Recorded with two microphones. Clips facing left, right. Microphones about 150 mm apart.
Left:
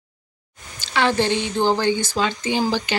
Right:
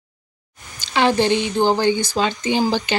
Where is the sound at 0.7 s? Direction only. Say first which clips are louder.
Right 3 dB; 15° right (ahead or behind).